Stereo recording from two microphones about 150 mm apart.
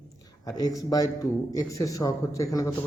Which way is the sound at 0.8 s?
25° left (ahead or behind).